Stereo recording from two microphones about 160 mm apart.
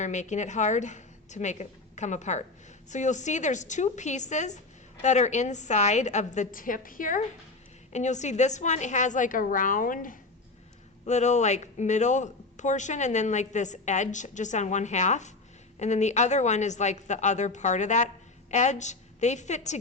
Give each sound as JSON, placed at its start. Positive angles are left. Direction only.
{"t": 0.0, "sound": "a woman's voice", "side_deg": 50}
{"t": 7.9, "sound": "speech", "side_deg": 45}
{"t": 11.0, "sound": "speech", "side_deg": 45}